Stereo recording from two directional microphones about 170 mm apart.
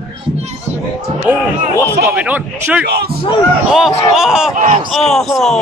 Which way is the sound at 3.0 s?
65° right (ahead or behind).